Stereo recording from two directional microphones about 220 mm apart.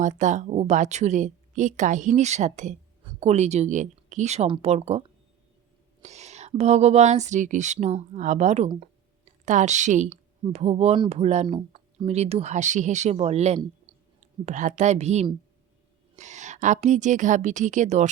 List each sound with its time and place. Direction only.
0.0 s a woman's voice: 35° right (ahead or behind)